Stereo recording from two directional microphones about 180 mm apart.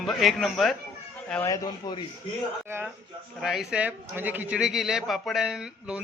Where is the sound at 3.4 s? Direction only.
Centre (ahead or behind).